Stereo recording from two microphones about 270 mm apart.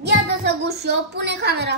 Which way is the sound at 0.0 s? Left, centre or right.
Right.